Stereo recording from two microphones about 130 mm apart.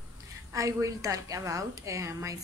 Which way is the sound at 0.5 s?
25° right (ahead or behind).